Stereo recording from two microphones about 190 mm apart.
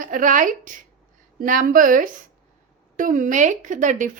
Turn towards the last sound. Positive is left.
turn(degrees=-40)  # may be behind; listen again after turning